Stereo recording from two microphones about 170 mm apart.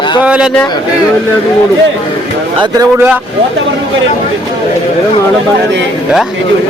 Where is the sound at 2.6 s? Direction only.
20° right (ahead or behind).